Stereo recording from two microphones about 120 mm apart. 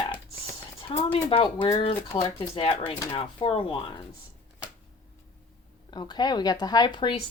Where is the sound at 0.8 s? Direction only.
45° left (ahead or behind).